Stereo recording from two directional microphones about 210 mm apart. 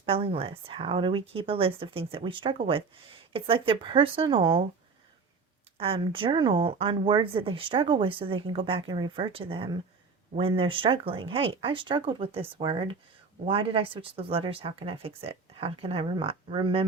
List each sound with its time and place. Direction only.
0.0 s speech: 25° right (ahead or behind)
5.7 s speech: 25° right (ahead or behind)